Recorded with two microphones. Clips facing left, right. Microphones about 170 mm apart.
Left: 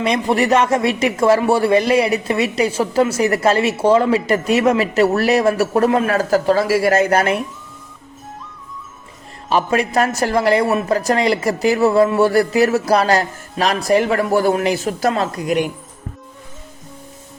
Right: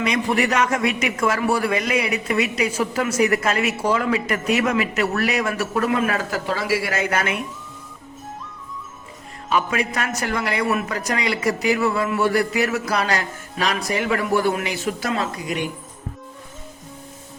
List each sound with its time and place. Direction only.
0.0 s a man's voice: 30° left (ahead or behind)
9.5 s a man's voice: 35° left (ahead or behind)
15.4 s speech: 60° left (ahead or behind)